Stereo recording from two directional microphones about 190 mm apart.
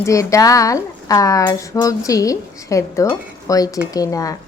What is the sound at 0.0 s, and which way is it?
Speech, 15° left (ahead or behind).